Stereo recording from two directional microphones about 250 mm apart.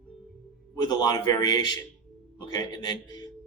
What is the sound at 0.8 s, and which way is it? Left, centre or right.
Speech, centre.